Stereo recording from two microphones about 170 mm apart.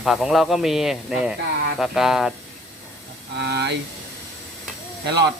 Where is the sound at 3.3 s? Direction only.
80° right.